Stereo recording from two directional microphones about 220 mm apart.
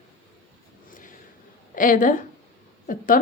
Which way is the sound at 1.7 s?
35° left (ahead or behind).